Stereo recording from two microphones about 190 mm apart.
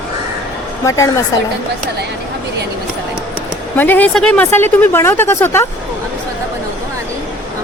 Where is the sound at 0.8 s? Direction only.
15° left (ahead or behind).